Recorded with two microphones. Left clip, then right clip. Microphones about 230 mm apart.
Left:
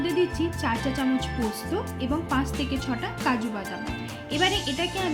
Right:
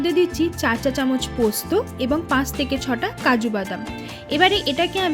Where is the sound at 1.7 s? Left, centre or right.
Right.